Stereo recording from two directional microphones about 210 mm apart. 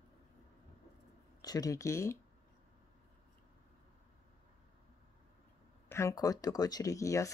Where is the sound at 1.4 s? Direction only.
15° left (ahead or behind).